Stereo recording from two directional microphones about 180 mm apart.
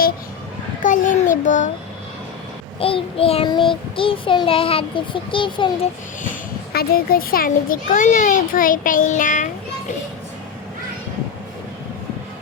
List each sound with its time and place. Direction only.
0.8 s a child's voice: 45° left (ahead or behind)
2.7 s child singing: 30° left (ahead or behind)
3.9 s a child's voice: 30° left (ahead or behind)
6.7 s a child's voice: 55° left (ahead or behind)